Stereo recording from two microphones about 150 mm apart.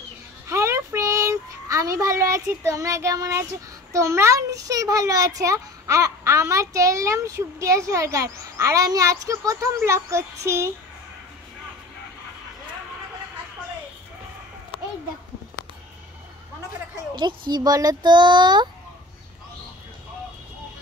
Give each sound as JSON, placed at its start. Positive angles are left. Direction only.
{"t": 0.5, "sound": "child singing", "side_deg": -20}
{"t": 3.9, "sound": "a child's voice", "side_deg": -20}
{"t": 17.5, "sound": "a child's voice", "side_deg": -25}